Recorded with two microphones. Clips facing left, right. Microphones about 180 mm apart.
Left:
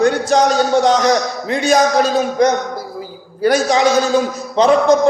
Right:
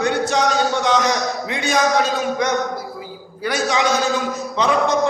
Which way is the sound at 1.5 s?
40° left (ahead or behind).